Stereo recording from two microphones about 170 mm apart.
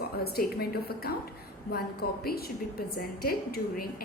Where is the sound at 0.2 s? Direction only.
65° left (ahead or behind).